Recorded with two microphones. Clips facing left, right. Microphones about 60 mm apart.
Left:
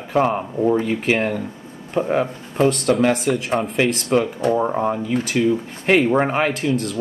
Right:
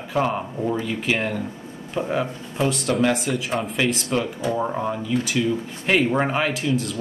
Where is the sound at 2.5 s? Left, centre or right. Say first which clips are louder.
Left 5 dB; left.